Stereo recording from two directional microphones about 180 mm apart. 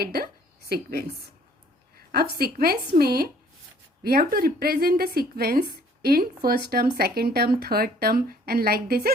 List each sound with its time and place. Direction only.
0.0 s a woman's voice: 60° right (ahead or behind)
2.4 s a woman's voice: 55° right (ahead or behind)